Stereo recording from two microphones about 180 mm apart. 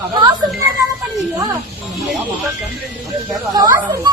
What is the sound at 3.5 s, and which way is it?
Speech, 20° right (ahead or behind).